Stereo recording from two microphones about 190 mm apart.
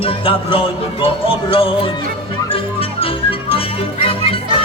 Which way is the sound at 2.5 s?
30° left (ahead or behind).